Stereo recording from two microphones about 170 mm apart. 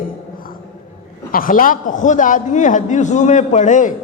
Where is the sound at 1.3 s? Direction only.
55° left (ahead or behind).